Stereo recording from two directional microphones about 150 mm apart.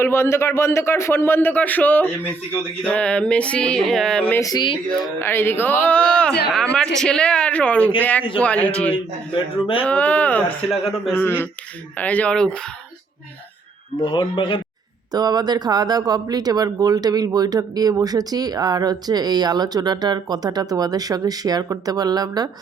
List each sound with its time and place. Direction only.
0.0 s a man's voice: 15° left (ahead or behind)
4.4 s speech: 25° left (ahead or behind)
5.2 s a man's voice: 15° left (ahead or behind)
14.0 s speech: 30° left (ahead or behind)
15.1 s speech: 25° right (ahead or behind)